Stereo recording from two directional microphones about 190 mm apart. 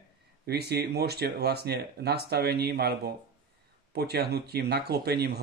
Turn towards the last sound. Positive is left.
turn(degrees=-55)  # may be behind; listen again after turning